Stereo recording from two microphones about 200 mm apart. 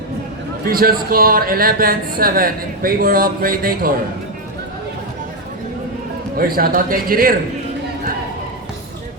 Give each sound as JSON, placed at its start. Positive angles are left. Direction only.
{"t": 0.6, "sound": "speech", "side_deg": -45}
{"t": 6.3, "sound": "speech", "side_deg": -45}